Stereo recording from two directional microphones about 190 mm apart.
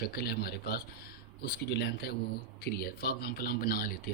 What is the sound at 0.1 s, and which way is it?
Speech, 55° left (ahead or behind).